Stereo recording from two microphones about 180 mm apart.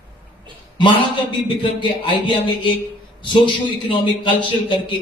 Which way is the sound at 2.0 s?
30° left (ahead or behind).